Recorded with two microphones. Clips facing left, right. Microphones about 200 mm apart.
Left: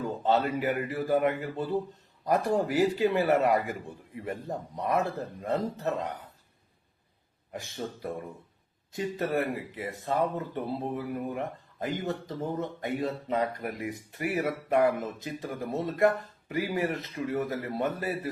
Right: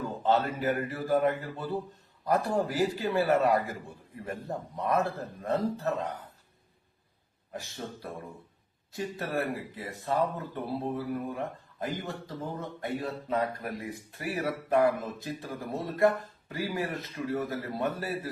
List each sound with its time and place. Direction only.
0.0 s a man's voice: 15° left (ahead or behind)
8.9 s speech: 20° left (ahead or behind)